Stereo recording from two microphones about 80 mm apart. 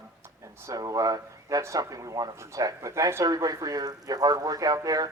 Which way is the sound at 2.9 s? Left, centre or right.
Right.